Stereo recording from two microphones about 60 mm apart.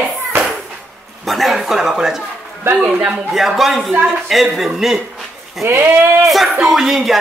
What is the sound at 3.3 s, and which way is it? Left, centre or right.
A man's voice, centre.